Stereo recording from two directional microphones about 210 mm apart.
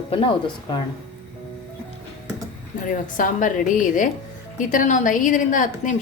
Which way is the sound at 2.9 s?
40° left (ahead or behind).